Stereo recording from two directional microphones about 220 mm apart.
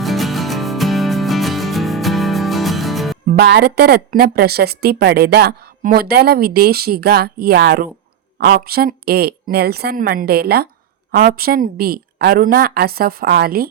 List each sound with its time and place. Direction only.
0.0 s music: centre (ahead or behind)
3.2 s speech: 50° right (ahead or behind)